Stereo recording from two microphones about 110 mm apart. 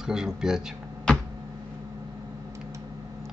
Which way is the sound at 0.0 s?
5° right (ahead or behind).